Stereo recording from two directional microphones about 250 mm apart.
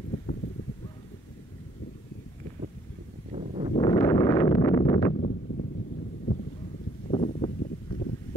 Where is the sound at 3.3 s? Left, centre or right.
Right.